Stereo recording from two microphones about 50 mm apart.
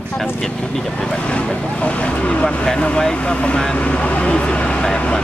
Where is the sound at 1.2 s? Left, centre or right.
Left.